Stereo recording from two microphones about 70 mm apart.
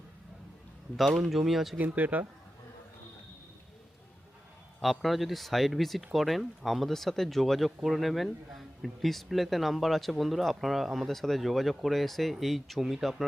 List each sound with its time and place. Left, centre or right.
0.9 s speech: centre
1.8 s speech: right
4.8 s speech: centre